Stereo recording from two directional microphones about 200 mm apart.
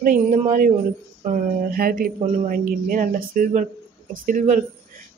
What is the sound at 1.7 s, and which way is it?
Speech, 45° right (ahead or behind).